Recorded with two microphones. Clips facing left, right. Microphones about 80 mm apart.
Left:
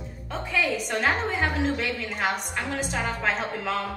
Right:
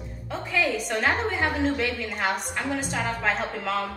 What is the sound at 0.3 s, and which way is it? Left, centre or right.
A woman's voice, centre.